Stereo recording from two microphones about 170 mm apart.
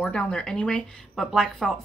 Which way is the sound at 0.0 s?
5° left (ahead or behind).